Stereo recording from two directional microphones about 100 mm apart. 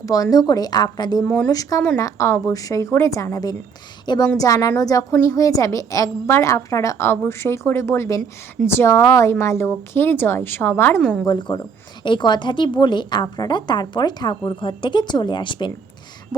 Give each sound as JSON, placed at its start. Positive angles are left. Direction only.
{"t": 0.0, "sound": "a woman's voice", "side_deg": 35}
{"t": 1.2, "sound": "speech", "side_deg": 10}
{"t": 1.5, "sound": "a woman's voice", "side_deg": 40}
{"t": 4.0, "sound": "a woman's voice", "side_deg": 50}
{"t": 4.4, "sound": "a woman's voice", "side_deg": 35}
{"t": 11.0, "sound": "a woman's voice", "side_deg": 5}
{"t": 11.3, "sound": "a woman's voice", "side_deg": 50}